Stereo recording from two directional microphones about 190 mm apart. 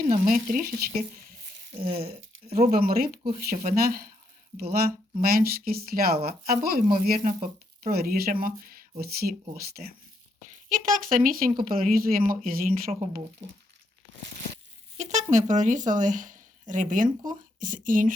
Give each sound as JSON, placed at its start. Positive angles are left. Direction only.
{"t": 0.1, "sound": "speech", "side_deg": -45}
{"t": 1.9, "sound": "speech", "side_deg": -30}
{"t": 2.6, "sound": "speech", "side_deg": -45}
{"t": 5.2, "sound": "speech", "side_deg": -50}
{"t": 14.9, "sound": "speech", "side_deg": -40}